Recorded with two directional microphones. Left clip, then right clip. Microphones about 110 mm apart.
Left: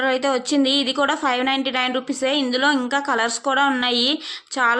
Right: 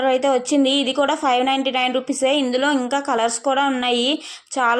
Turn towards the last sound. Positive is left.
turn(degrees=-15)  # may be behind; listen again after turning